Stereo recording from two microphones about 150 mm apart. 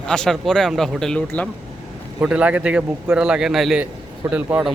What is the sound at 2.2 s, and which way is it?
A man's voice, 10° right (ahead or behind).